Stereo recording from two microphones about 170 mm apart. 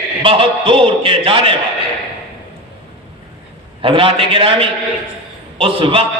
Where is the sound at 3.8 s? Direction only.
30° right (ahead or behind).